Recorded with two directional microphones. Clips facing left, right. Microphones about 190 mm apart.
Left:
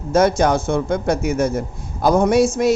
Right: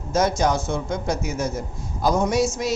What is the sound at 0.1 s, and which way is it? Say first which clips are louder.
A man's voice: left 5 dB; 55° left (ahead or behind).